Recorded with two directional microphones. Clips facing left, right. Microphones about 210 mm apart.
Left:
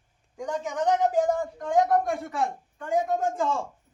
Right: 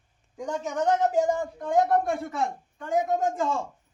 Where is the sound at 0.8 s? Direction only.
Centre (ahead or behind).